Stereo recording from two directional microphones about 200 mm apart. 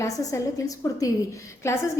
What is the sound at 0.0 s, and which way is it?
A woman's voice, 15° left (ahead or behind).